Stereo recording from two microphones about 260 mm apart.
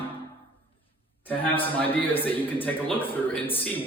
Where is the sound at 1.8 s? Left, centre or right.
Centre.